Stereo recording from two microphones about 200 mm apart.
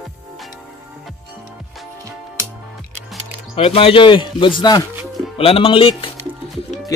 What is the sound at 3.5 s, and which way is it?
Speech, 30° left (ahead or behind).